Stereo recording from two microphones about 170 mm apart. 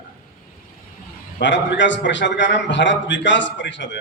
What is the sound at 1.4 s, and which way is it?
A man's voice, 90° left.